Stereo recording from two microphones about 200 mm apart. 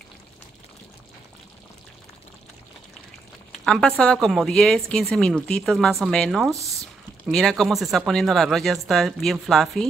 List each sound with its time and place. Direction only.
3.6 s speech: 5° left (ahead or behind)